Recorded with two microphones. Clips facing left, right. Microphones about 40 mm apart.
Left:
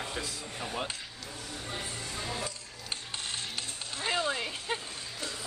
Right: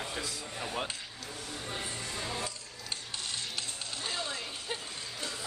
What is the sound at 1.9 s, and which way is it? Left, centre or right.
Music, centre.